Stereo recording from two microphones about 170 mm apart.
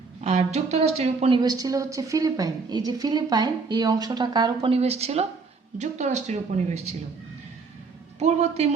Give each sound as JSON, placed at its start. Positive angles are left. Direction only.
{"t": 0.2, "sound": "speech", "side_deg": -40}
{"t": 1.4, "sound": "a woman's voice", "side_deg": -20}
{"t": 8.2, "sound": "speech", "side_deg": -40}